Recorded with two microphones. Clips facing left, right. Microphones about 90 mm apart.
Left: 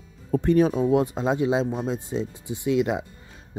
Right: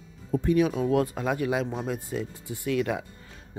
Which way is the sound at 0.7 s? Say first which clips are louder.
Left 3 dB; 20° left (ahead or behind).